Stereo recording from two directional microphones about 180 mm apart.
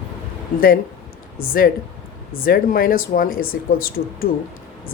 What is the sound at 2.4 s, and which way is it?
Speech, 55° left (ahead or behind).